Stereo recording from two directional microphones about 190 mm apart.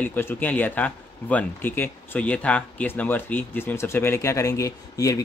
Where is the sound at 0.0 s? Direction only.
10° left (ahead or behind).